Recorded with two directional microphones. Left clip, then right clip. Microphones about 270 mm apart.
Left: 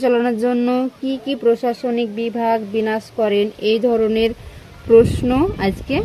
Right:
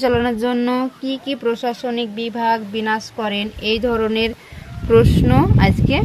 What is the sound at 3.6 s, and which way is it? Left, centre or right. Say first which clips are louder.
Speech: left 2 dB; right.